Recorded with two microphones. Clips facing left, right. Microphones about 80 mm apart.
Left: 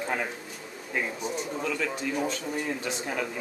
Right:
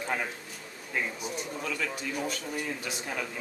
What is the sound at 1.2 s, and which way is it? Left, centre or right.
Speech, centre.